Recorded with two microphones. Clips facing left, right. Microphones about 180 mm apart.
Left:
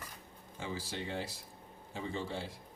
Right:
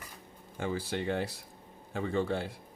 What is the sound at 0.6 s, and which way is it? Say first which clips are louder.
Speech: right 7 dB; 55° right (ahead or behind).